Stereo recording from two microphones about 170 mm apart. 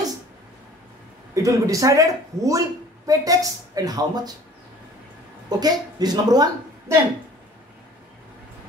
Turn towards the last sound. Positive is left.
turn(degrees=-25)  # may be behind; listen again after turning